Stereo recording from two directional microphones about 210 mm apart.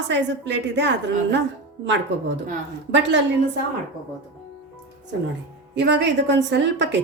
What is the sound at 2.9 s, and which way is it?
Speech, 55° right (ahead or behind).